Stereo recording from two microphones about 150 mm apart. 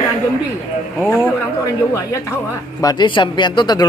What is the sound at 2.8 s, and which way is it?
Speech, 25° left (ahead or behind).